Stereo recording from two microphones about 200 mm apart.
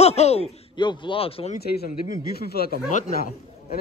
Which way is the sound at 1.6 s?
50° left (ahead or behind).